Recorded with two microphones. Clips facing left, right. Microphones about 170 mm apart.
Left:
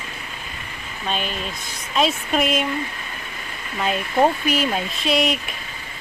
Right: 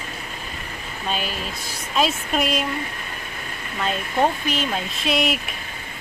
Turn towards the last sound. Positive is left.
turn(degrees=0)  # may be behind; listen again after turning